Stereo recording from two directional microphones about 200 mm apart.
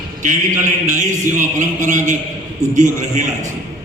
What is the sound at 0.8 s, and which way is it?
Speech, 40° right (ahead or behind).